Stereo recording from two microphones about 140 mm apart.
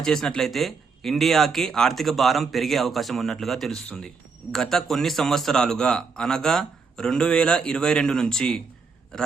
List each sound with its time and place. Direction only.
0.0 s speech: 5° left (ahead or behind)